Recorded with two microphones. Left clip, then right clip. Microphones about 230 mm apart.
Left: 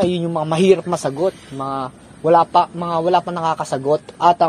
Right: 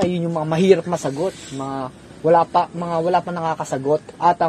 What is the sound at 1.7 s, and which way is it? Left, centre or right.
A man's voice, left.